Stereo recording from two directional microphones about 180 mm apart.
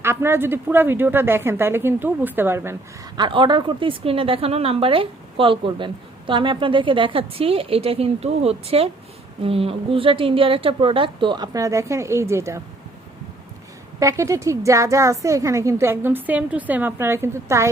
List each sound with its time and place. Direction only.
0.0 s a woman's voice: 15° right (ahead or behind)
3.2 s a woman's voice: 25° right (ahead or behind)
14.0 s a woman's voice: 15° right (ahead or behind)